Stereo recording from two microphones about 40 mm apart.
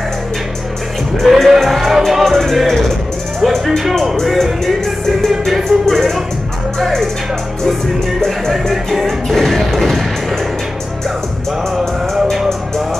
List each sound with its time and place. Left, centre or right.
1.2 s music: centre
3.3 s speech: centre
4.2 s music: centre
8.2 s music: centre